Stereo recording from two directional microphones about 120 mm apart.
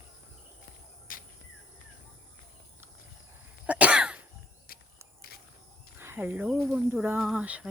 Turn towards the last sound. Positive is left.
turn(degrees=-10)  # may be behind; listen again after turning